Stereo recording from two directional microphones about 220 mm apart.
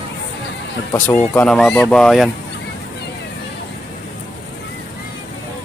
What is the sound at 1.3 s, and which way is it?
Speech, 5° left (ahead or behind).